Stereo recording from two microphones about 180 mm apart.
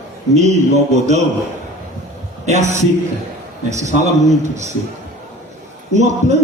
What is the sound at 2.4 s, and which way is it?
Speech, 40° right (ahead or behind).